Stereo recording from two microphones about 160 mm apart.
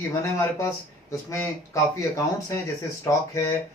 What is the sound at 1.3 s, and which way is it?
Speech, 20° left (ahead or behind).